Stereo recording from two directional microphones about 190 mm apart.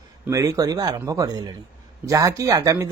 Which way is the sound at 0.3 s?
15° right (ahead or behind).